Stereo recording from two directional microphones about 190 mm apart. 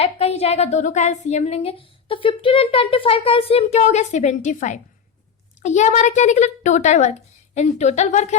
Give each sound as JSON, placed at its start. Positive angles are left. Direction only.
{"t": 0.0, "sound": "a woman's voice", "side_deg": 35}